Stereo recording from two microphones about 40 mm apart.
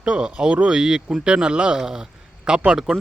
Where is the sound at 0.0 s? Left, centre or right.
Right.